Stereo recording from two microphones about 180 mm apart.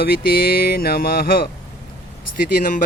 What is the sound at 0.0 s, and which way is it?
Speech, 55° left (ahead or behind).